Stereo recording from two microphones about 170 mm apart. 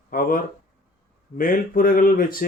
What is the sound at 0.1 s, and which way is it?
Speech, 55° left (ahead or behind).